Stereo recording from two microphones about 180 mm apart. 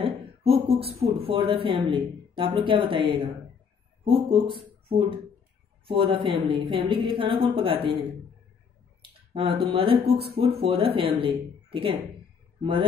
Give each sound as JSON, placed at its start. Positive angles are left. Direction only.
{"t": 0.0, "sound": "a woman's voice", "side_deg": -35}
{"t": 9.3, "sound": "speech", "side_deg": -30}